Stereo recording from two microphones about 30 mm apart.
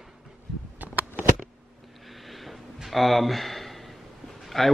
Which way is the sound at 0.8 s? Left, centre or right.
Right.